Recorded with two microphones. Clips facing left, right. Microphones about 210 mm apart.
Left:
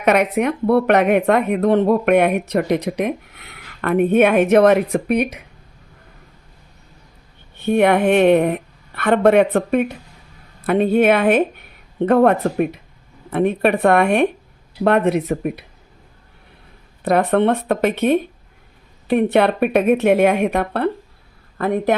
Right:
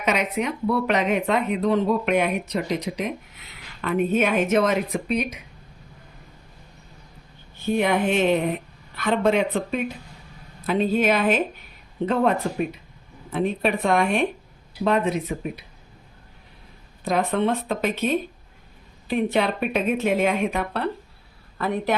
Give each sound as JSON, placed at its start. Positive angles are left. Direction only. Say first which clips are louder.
{"t": 0.0, "sound": "speech", "louder": "left 8 dB", "side_deg": 60}
{"t": 7.5, "sound": "speech", "louder": "left 7 dB", "side_deg": 65}
{"t": 17.0, "sound": "speech", "louder": "left 6 dB", "side_deg": 65}